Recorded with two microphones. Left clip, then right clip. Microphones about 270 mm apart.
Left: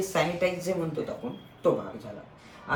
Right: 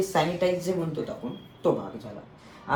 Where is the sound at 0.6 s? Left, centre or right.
Centre.